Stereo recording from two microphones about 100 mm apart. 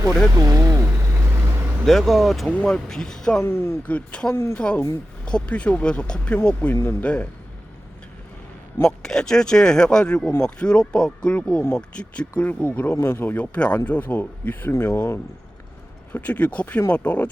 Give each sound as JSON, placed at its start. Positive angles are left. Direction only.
{"t": 0.3, "sound": "speech", "side_deg": -35}
{"t": 1.8, "sound": "speech", "side_deg": 0}
{"t": 2.5, "sound": "speech", "side_deg": 10}
{"t": 3.4, "sound": "speech", "side_deg": 25}
{"t": 8.8, "sound": "speech", "side_deg": 5}